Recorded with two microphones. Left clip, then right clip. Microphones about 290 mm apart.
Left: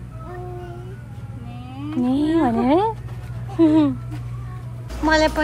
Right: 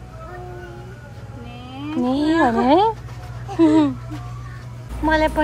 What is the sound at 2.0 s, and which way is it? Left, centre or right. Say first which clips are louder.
Speech: right 2 dB; centre.